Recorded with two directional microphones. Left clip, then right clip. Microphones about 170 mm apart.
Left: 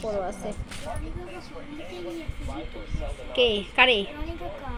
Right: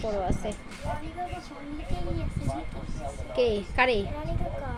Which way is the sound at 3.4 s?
35° right (ahead or behind).